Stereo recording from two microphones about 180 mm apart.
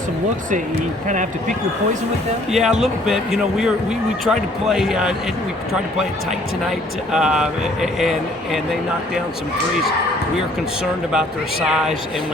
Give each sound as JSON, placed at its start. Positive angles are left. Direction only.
{"t": 1.0, "sound": "speech", "side_deg": -45}
{"t": 2.5, "sound": "speech", "side_deg": 0}
{"t": 6.7, "sound": "speech", "side_deg": -5}
{"t": 11.1, "sound": "speech", "side_deg": -5}